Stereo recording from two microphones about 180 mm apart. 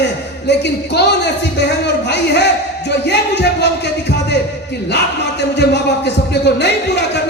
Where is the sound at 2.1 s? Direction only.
70° left (ahead or behind).